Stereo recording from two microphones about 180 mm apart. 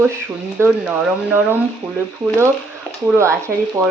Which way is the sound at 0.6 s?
10° right (ahead or behind).